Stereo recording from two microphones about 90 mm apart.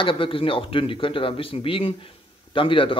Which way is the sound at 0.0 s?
75° left (ahead or behind).